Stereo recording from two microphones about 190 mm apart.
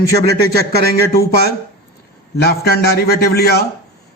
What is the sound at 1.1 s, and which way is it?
A man's voice, 55° left (ahead or behind).